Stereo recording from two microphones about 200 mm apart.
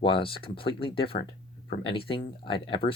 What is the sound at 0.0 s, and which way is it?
Speech, 25° left (ahead or behind).